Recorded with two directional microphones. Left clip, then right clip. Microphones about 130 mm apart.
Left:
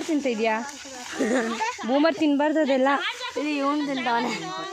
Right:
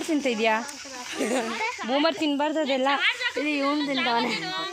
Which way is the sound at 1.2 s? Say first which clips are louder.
Left 2 dB; 90° left.